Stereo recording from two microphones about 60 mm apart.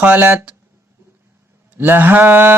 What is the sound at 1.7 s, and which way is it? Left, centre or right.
Speech, right.